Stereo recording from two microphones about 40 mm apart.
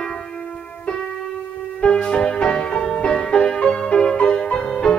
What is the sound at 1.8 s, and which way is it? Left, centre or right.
Music, left.